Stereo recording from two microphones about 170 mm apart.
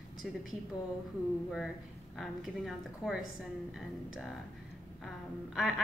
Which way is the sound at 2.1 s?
Centre (ahead or behind).